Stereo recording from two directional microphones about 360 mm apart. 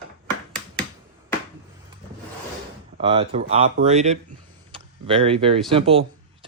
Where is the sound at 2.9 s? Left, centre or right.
Centre.